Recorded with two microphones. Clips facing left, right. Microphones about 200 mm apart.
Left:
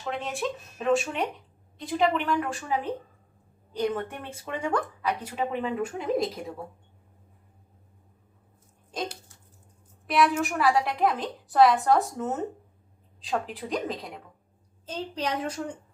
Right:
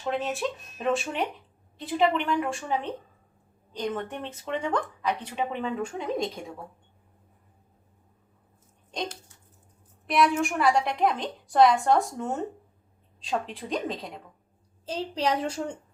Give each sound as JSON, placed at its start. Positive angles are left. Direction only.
{"t": 0.1, "sound": "a woman's voice", "side_deg": 0}
{"t": 8.9, "sound": "a sound", "side_deg": 5}
{"t": 10.1, "sound": "a woman's voice", "side_deg": 0}
{"t": 14.8, "sound": "a woman's voice", "side_deg": -35}